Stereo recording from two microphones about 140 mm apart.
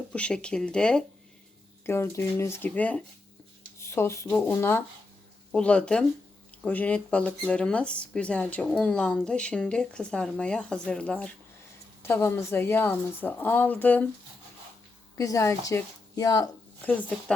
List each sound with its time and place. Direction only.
0.1 s speech: 5° left (ahead or behind)
1.9 s a woman's voice: 20° left (ahead or behind)
5.5 s speech: 5° left (ahead or behind)
15.2 s a woman's voice: 20° left (ahead or behind)
16.8 s speech: 10° left (ahead or behind)